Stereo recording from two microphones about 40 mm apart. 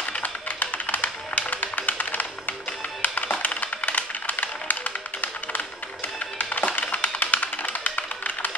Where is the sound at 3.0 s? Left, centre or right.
Left.